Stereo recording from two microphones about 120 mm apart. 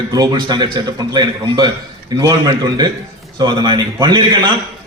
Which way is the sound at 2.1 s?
30° right (ahead or behind).